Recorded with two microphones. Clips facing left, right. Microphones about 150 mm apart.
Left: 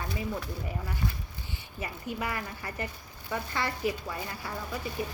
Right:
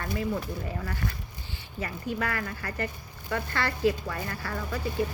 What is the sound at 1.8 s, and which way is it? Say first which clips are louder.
A woman's voice: right 3 dB; 15° left (ahead or behind).